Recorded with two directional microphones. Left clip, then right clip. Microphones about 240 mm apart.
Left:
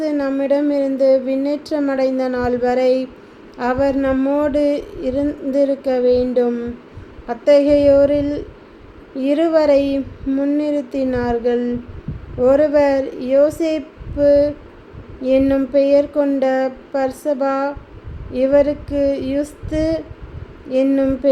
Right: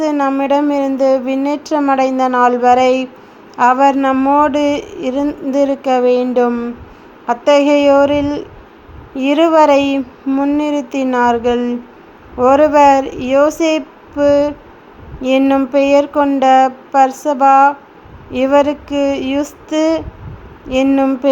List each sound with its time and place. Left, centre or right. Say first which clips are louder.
0.0 s speech: right 5 dB; centre